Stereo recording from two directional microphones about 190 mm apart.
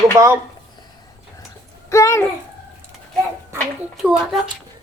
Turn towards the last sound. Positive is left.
turn(degrees=-5)  # may be behind; listen again after turning